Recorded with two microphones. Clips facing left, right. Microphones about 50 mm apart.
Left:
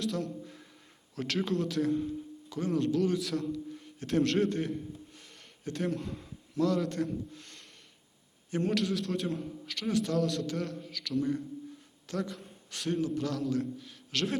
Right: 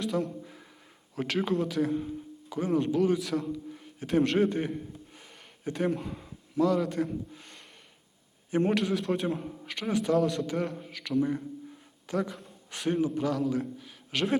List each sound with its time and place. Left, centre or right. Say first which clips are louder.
0.0 s speech: right 4 dB; centre
0.3 s a sound: even; centre
1.1 s speech: right 3 dB; centre
3.2 s a man's voice: right 2 dB; centre